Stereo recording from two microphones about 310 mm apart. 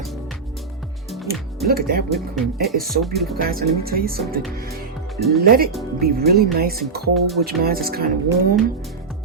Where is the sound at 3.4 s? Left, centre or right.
Right.